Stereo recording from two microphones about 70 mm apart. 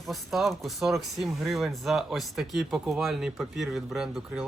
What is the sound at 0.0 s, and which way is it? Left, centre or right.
Speech, centre.